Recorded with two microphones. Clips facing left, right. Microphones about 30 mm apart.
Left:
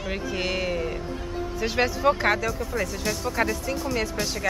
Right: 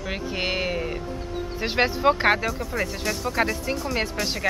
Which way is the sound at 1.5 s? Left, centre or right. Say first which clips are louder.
Right 2 dB; right.